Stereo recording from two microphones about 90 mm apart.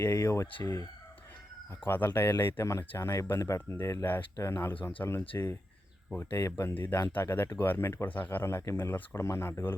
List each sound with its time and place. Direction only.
0.0 s speech: 30° left (ahead or behind)
1.9 s speech: 20° left (ahead or behind)
5.3 s speech: 30° left (ahead or behind)